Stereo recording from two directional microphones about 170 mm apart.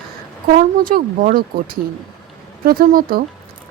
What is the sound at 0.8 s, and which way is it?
Speech, 55° right (ahead or behind).